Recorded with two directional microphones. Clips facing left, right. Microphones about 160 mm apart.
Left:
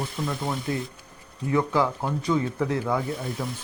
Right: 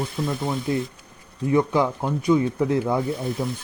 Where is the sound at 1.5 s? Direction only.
20° right (ahead or behind).